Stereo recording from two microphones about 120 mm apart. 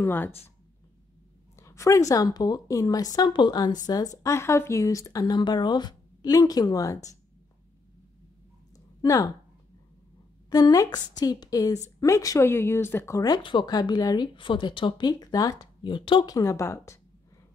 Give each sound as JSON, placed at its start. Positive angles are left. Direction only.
{"t": 0.0, "sound": "speech", "side_deg": 15}
{"t": 1.6, "sound": "speech", "side_deg": 25}
{"t": 8.7, "sound": "a sound", "side_deg": 30}
{"t": 10.5, "sound": "speech", "side_deg": 30}
{"t": 16.3, "sound": "speech", "side_deg": 25}